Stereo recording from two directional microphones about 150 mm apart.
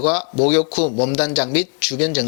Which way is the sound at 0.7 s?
45° left (ahead or behind).